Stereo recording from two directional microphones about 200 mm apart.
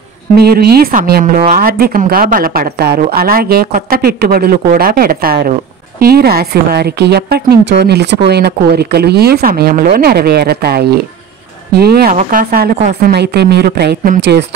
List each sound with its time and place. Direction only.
0.4 s a woman's voice: 50° right (ahead or behind)